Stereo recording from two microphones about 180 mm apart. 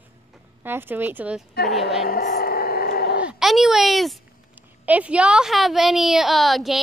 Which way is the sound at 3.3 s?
Centre (ahead or behind).